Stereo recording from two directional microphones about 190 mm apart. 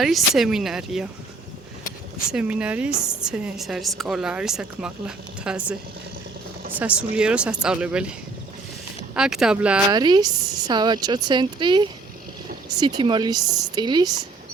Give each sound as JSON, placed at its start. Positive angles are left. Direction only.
{"t": 0.0, "sound": "a woman's voice", "side_deg": 0}
{"t": 2.3, "sound": "a woman's voice", "side_deg": -5}
{"t": 6.7, "sound": "a woman's voice", "side_deg": -5}
{"t": 9.1, "sound": "a woman's voice", "side_deg": -5}
{"t": 9.9, "sound": "speech", "side_deg": -20}